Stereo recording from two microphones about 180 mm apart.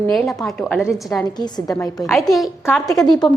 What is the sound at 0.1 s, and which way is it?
A woman's voice, centre (ahead or behind).